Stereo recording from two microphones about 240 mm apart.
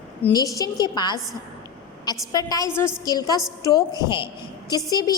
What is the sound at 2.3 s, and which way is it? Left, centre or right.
A woman's voice, centre.